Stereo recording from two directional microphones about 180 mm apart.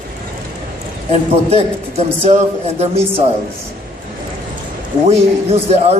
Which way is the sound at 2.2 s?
40° right (ahead or behind).